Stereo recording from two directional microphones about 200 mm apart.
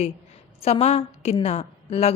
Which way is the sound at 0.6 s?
30° left (ahead or behind).